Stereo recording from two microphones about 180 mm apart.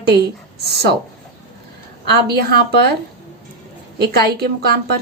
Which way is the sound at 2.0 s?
65° right (ahead or behind).